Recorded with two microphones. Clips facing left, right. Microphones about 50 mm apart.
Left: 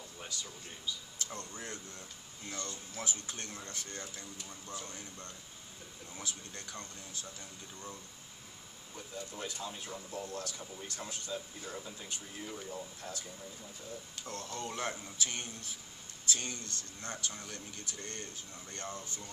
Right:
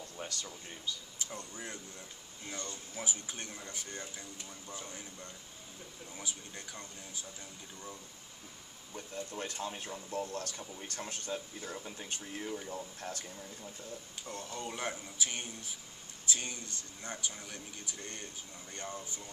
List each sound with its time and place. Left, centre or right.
0.3 s speech: right
1.1 s a man's voice: centre
8.9 s speech: right
12.4 s a man's voice: centre
13.0 s speech: right
14.2 s a man's voice: centre